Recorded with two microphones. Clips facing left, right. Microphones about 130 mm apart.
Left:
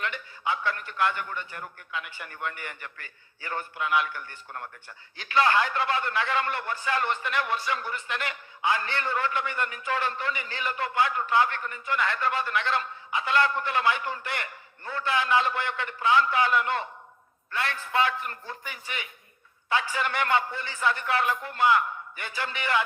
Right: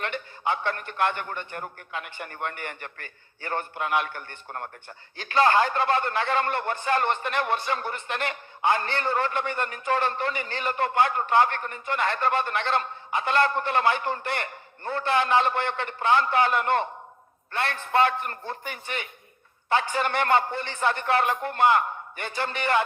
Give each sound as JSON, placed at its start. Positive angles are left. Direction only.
{"t": 0.4, "sound": "a man's voice", "side_deg": -50}
{"t": 5.1, "sound": "a man's voice", "side_deg": -35}
{"t": 8.0, "sound": "a man's voice", "side_deg": -40}
{"t": 8.9, "sound": "a man's voice", "side_deg": -35}
{"t": 13.1, "sound": "a man's voice", "side_deg": -45}
{"t": 13.5, "sound": "a man's voice", "side_deg": -35}
{"t": 16.0, "sound": "a man's voice", "side_deg": -45}
{"t": 19.7, "sound": "a man's voice", "side_deg": -30}